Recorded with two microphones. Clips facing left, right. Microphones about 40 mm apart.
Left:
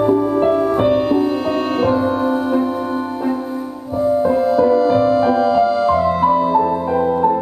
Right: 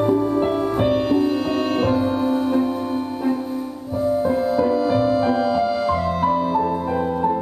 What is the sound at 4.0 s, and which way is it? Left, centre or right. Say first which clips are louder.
Music: left 5 dB; centre.